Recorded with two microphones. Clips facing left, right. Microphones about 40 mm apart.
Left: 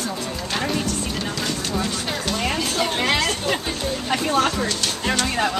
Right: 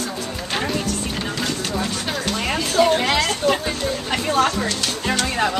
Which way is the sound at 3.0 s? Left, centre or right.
Centre.